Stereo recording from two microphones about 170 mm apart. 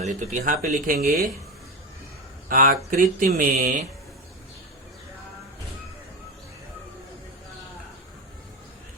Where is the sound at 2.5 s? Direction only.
55° right (ahead or behind).